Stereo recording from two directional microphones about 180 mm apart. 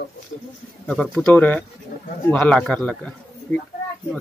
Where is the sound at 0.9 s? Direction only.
5° left (ahead or behind).